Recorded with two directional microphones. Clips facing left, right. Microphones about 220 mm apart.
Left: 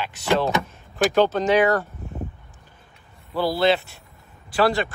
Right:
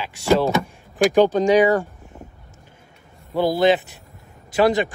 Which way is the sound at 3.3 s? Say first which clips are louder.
Right 3 dB; 20° right (ahead or behind).